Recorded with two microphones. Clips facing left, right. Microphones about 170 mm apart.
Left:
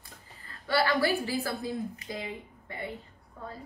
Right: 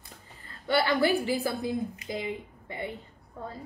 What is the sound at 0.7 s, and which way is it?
A woman's voice, 20° right (ahead or behind).